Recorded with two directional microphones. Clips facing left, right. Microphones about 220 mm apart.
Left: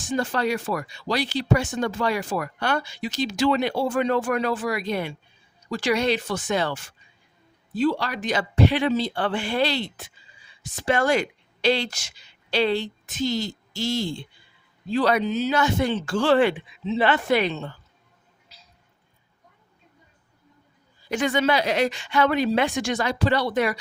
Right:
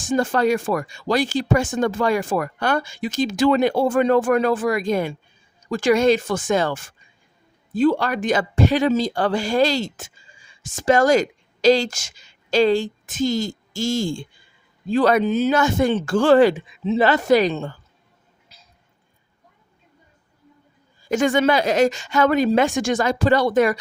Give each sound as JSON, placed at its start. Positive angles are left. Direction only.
{"t": 0.1, "sound": "speech", "side_deg": -50}
{"t": 18.5, "sound": "music", "side_deg": -50}
{"t": 21.0, "sound": "speech", "side_deg": -45}